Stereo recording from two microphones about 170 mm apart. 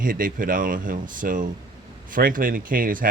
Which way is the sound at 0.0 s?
55° right (ahead or behind).